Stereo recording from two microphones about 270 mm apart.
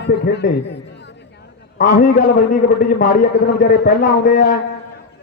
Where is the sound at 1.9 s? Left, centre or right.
Left.